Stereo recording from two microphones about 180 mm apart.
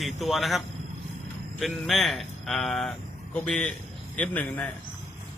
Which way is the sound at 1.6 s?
Centre (ahead or behind).